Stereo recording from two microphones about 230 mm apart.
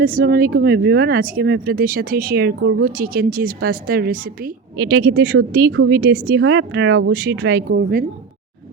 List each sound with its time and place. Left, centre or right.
0.0 s speech: right